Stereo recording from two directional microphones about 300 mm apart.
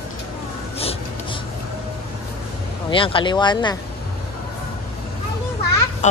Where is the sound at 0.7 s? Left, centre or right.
Centre.